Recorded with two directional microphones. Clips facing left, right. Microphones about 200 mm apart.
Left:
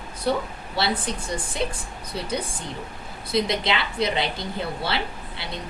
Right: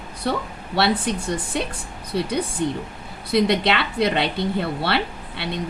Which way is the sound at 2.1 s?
65° right (ahead or behind).